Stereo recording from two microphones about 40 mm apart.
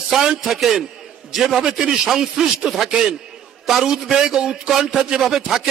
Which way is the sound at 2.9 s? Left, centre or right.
Centre.